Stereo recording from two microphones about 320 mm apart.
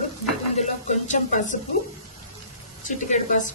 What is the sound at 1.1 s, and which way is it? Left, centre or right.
Speech, left.